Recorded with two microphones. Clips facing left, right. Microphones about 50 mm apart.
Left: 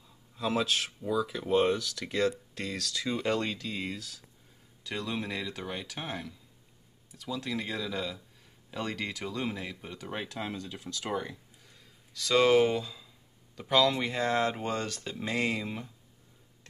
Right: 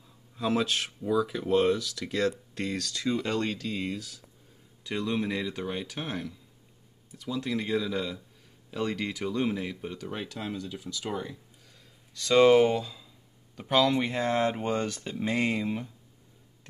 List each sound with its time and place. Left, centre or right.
0.4 s speech: centre
1.6 s speech: centre
9.9 s speech: centre
12.1 s speech: centre